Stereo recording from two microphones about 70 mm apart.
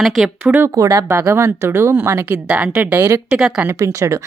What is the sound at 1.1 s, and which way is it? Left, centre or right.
Speech, right.